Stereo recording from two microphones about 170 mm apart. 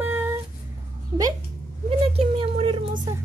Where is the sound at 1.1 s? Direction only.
25° right (ahead or behind).